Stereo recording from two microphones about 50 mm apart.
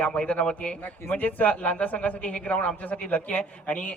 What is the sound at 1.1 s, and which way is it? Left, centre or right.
A man's voice, left.